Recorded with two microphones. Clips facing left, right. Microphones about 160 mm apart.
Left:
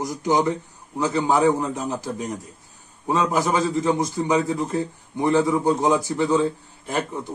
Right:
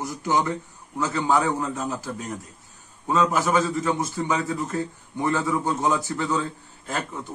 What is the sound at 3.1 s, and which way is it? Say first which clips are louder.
A man's voice: even; 15° left (ahead or behind).